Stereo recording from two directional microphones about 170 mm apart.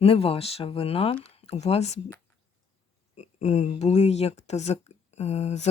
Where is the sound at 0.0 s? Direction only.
35° left (ahead or behind).